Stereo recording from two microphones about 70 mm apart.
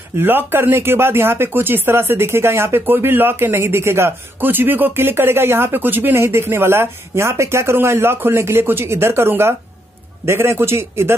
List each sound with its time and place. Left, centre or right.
0.2 s speech: right
6.1 s speech: right